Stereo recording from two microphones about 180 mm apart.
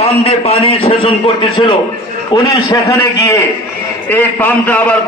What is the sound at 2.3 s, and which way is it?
A man's voice, 20° left (ahead or behind).